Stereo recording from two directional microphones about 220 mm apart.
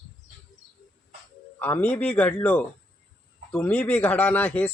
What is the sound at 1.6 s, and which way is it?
Speech, 10° left (ahead or behind).